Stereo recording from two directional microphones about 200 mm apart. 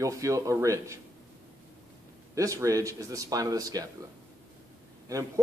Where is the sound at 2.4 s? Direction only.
15° right (ahead or behind).